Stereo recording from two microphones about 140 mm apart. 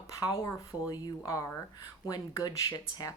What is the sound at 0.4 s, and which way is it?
Speech, 25° left (ahead or behind).